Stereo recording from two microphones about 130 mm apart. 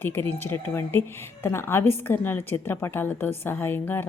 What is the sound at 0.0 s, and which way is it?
Speech, 15° left (ahead or behind).